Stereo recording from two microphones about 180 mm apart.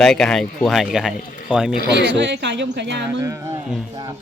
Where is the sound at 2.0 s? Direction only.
75° right (ahead or behind).